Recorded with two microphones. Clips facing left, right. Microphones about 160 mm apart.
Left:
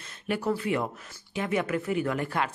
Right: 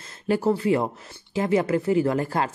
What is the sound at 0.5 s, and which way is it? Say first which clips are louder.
Speech: right 5 dB; 30° right (ahead or behind).